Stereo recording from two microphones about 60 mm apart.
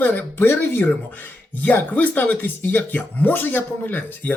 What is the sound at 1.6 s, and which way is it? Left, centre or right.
Speech, left.